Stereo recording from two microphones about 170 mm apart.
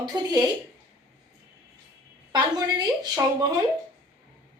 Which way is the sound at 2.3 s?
25° right (ahead or behind).